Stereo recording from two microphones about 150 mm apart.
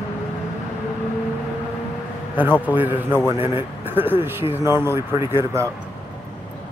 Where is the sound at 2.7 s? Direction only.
15° right (ahead or behind).